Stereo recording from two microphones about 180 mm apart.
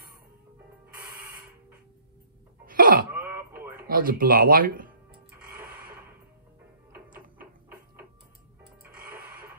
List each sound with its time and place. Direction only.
2.6 s throat clearing: 50° right (ahead or behind)
3.2 s throat clearing: 15° right (ahead or behind)
3.8 s speech: 50° right (ahead or behind)
8.9 s a sound: 55° right (ahead or behind)